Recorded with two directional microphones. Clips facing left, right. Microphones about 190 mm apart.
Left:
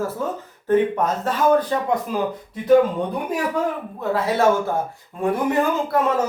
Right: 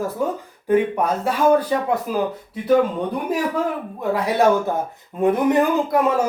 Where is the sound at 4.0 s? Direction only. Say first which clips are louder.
Right 1 dB; 15° right (ahead or behind).